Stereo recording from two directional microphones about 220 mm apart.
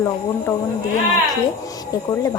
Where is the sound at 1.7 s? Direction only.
15° left (ahead or behind).